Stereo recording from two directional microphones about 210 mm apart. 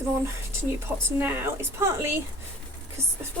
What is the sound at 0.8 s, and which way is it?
A woman's voice, 10° right (ahead or behind).